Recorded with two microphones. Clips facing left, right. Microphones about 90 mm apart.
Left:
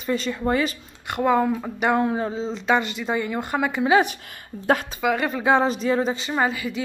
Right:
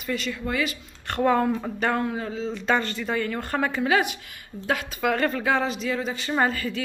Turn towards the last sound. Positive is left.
turn(degrees=10)  # may be behind; listen again after turning